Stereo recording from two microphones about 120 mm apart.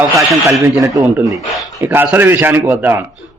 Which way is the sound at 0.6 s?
25° right (ahead or behind).